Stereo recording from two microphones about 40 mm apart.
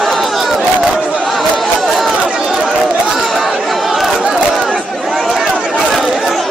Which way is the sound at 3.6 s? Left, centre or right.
Centre.